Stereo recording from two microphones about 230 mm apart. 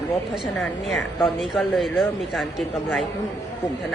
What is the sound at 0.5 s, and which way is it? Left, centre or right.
Speech, centre.